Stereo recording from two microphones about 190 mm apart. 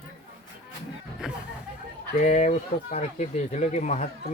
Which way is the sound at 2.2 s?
40° left (ahead or behind).